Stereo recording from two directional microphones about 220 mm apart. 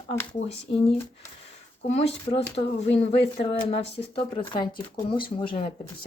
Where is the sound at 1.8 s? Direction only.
30° left (ahead or behind).